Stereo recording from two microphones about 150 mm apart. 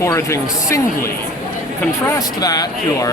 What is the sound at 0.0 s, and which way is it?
Speech, 20° left (ahead or behind).